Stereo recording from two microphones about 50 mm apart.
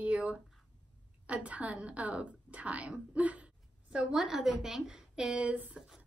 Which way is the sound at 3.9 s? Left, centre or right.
Centre.